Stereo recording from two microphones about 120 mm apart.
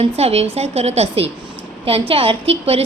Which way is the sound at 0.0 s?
60° right (ahead or behind).